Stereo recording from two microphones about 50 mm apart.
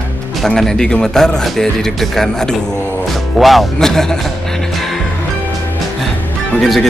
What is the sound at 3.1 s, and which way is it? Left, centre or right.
Music, centre.